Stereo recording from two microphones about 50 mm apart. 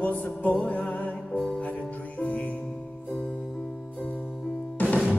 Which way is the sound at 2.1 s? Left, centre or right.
Left.